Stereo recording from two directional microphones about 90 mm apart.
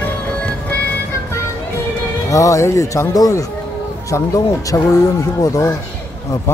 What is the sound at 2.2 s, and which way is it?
Speech, 35° left (ahead or behind).